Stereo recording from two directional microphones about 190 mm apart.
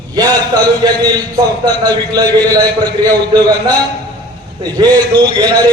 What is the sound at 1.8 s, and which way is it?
Speech, 20° right (ahead or behind).